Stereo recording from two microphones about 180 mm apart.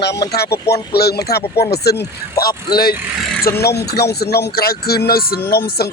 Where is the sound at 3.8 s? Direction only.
65° left (ahead or behind).